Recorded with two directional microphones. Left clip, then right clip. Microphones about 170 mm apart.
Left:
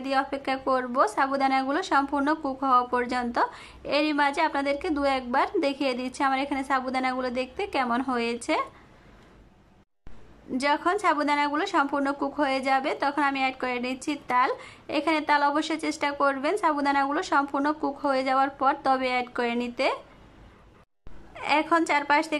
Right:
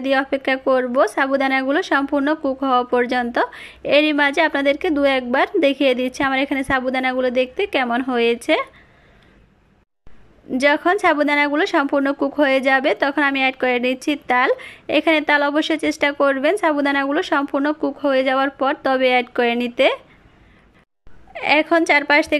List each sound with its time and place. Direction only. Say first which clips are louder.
0.0 s a woman's voice: right 8 dB; 15° right (ahead or behind)
10.6 s a woman's voice: right 8 dB; 20° right (ahead or behind)
21.3 s a woman's voice: right 7 dB; 15° right (ahead or behind)